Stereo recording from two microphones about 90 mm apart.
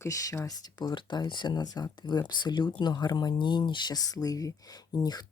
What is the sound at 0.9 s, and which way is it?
Speech, 65° left (ahead or behind).